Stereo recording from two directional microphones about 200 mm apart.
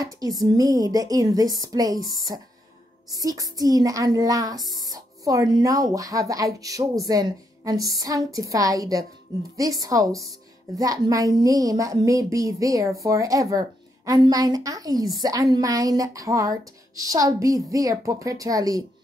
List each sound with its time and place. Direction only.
0.4 s a woman's voice: 20° right (ahead or behind)
3.1 s a woman's voice: 20° right (ahead or behind)